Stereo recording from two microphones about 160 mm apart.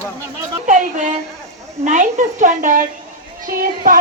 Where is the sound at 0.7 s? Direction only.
50° right (ahead or behind).